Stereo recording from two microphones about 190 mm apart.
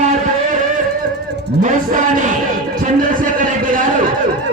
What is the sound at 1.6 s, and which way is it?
Speech, 40° right (ahead or behind).